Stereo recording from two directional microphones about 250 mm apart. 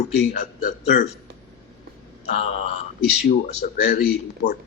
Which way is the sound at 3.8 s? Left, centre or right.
Left.